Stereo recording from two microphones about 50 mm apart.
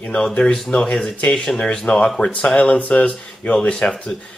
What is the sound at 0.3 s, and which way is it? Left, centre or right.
Speech, centre.